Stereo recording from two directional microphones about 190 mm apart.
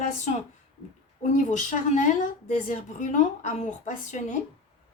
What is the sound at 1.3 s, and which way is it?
A woman's voice, 40° left (ahead or behind).